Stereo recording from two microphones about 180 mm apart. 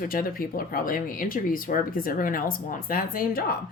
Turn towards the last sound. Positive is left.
turn(degrees=55)  # may be behind; listen again after turning